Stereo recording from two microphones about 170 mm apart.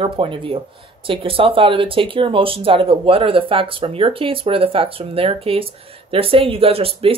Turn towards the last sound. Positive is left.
turn(degrees=-35)  # may be behind; listen again after turning